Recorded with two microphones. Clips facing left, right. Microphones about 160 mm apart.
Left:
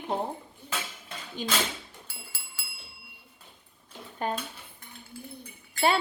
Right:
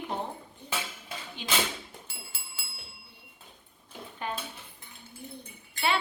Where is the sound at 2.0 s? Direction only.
20° right (ahead or behind).